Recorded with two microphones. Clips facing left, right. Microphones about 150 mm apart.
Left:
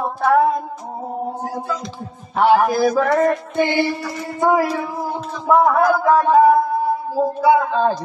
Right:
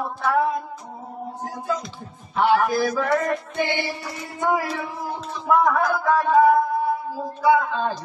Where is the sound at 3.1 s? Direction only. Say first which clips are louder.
Left 6 dB; 40° left (ahead or behind).